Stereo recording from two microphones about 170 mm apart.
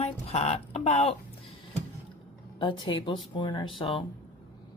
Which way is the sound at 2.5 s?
25° left (ahead or behind).